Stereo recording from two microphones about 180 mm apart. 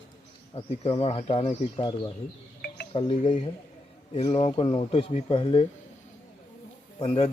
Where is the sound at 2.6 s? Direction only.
65° left (ahead or behind).